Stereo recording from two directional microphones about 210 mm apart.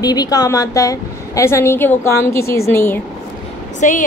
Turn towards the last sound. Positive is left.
turn(degrees=35)  # may be behind; listen again after turning